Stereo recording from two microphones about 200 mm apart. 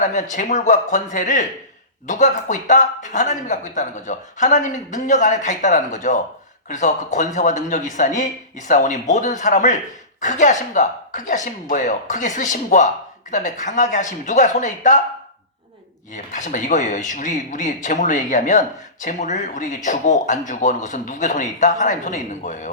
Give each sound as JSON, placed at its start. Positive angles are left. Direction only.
{"t": 0.0, "sound": "speech", "side_deg": 40}
{"t": 16.1, "sound": "speech", "side_deg": 40}